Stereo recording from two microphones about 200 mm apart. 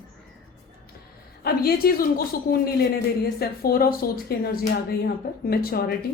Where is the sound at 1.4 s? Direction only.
50° left (ahead or behind).